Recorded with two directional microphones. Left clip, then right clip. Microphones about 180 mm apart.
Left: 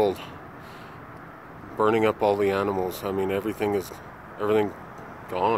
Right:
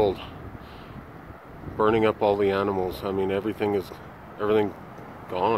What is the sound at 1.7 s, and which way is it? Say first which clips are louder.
Speech: even; 5° left (ahead or behind).